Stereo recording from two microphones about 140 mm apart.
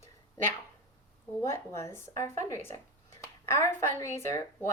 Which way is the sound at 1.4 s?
20° left (ahead or behind).